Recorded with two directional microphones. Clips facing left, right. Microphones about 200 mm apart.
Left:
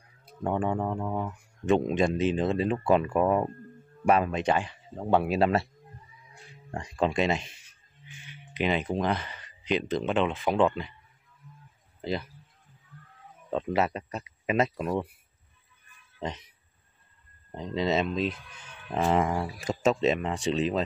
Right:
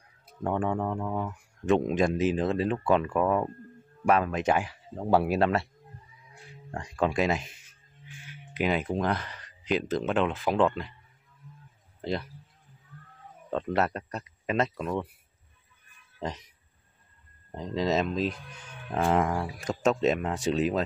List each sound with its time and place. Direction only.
0.4 s speech: 5° left (ahead or behind)
4.0 s speech: centre (ahead or behind)
6.8 s speech: centre (ahead or behind)
12.0 s a man's voice: centre (ahead or behind)
13.5 s speech: 5° left (ahead or behind)
16.2 s speech: centre (ahead or behind)
18.1 s speech: 40° right (ahead or behind)
18.9 s speech: centre (ahead or behind)